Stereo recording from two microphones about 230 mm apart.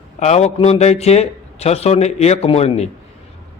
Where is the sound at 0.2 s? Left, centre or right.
Left.